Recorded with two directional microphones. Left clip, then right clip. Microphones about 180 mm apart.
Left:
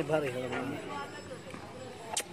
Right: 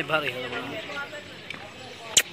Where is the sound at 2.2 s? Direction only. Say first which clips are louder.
Right 17 dB; 5° right (ahead or behind).